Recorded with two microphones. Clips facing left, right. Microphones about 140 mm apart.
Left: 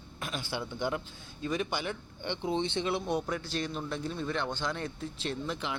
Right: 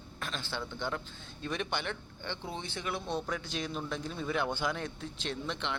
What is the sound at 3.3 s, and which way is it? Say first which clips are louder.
A man's voice: left 2 dB; centre (ahead or behind).